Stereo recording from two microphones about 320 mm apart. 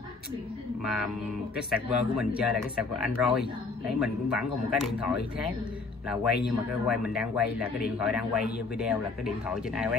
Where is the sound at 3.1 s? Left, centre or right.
Centre.